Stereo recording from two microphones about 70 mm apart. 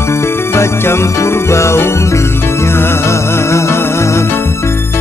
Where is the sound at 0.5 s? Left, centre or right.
Left.